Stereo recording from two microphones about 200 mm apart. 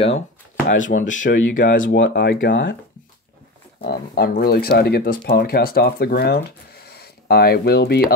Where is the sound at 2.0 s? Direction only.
60° left (ahead or behind).